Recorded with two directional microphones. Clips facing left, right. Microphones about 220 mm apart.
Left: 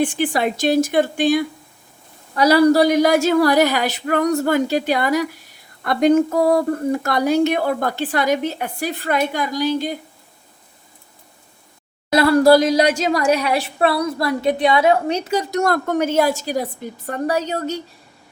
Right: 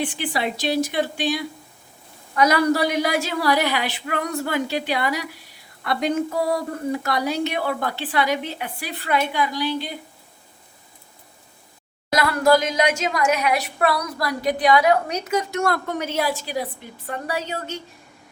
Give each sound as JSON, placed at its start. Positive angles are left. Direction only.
{"t": 0.0, "sound": "speech", "side_deg": 45}
{"t": 2.3, "sound": "speech", "side_deg": 35}
{"t": 12.1, "sound": "a woman's voice", "side_deg": 30}